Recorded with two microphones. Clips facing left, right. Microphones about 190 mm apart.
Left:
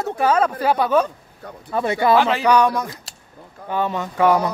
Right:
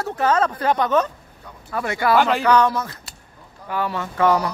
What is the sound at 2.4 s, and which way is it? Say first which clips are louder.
A man's voice: left 1 dB; 15° left (ahead or behind).